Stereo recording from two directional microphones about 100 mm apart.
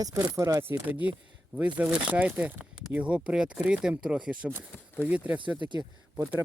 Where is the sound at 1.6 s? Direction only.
10° right (ahead or behind).